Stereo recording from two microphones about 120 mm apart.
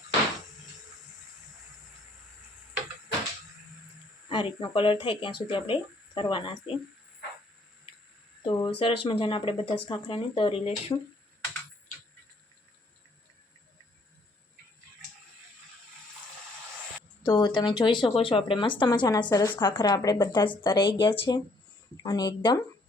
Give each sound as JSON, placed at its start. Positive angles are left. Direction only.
{"t": 4.3, "sound": "speech", "side_deg": 45}
{"t": 8.4, "sound": "speech", "side_deg": 45}
{"t": 17.2, "sound": "speech", "side_deg": 35}